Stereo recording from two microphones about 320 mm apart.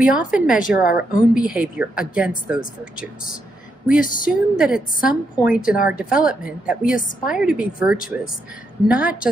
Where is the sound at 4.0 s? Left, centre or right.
Left.